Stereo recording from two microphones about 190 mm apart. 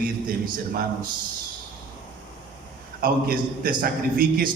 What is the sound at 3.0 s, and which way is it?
A man's voice, 50° right (ahead or behind).